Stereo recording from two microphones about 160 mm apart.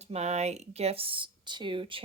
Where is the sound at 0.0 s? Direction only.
40° right (ahead or behind).